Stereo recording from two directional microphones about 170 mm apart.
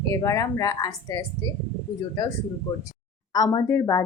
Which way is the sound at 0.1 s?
20° left (ahead or behind).